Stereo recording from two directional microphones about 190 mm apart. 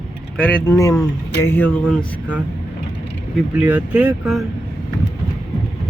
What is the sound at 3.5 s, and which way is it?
Speech, 5° right (ahead or behind).